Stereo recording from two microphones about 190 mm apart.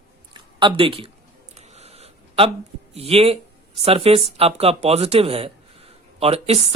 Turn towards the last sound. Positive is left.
turn(degrees=-30)  # may be behind; listen again after turning